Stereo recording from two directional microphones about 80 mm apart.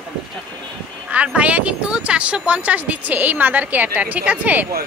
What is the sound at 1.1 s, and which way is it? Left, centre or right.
Speech, centre.